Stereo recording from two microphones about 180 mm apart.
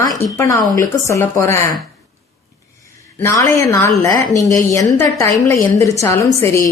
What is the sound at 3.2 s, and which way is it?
A woman's voice, 20° left (ahead or behind).